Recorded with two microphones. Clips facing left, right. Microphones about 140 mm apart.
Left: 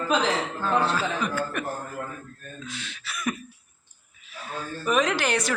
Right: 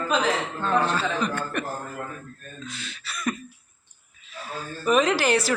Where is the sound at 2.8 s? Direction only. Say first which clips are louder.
Even; 5° left (ahead or behind).